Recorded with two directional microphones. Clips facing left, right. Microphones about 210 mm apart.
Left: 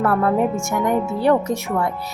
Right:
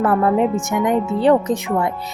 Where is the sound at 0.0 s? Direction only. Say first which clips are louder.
Right 2 dB; 20° right (ahead or behind).